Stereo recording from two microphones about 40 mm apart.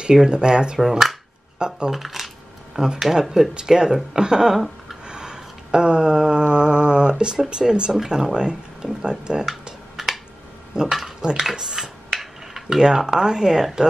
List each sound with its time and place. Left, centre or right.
0.0 s speech: centre
0.7 s speech: centre
1.9 s coin: centre
3.2 s speech: centre
5.0 s a sound: right
7.4 s speech: right
9.9 s a sound: centre
10.8 s speech: centre